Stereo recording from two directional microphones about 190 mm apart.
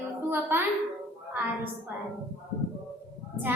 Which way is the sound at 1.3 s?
10° right (ahead or behind).